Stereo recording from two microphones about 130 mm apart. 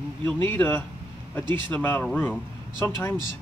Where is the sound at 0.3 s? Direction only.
15° left (ahead or behind).